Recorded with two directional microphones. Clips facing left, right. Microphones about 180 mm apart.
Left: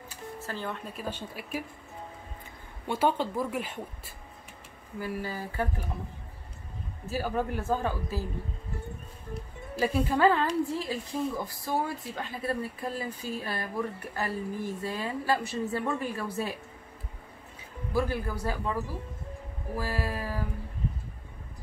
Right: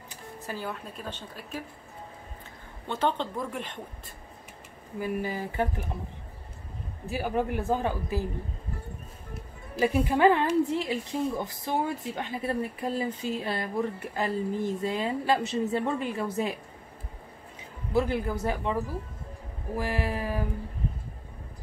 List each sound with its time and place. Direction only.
0.4 s speech: 10° right (ahead or behind)
0.9 s speech: 10° left (ahead or behind)
2.9 s speech: 10° left (ahead or behind)
4.9 s a woman's voice: 20° right (ahead or behind)
7.1 s a man's voice: 15° right (ahead or behind)
9.8 s a man's voice: 15° right (ahead or behind)
17.9 s a woman's voice: 20° right (ahead or behind)